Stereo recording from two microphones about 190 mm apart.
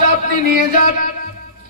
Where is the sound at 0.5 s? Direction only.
45° left (ahead or behind).